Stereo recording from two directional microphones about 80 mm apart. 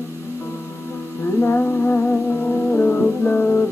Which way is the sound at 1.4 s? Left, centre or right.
Left.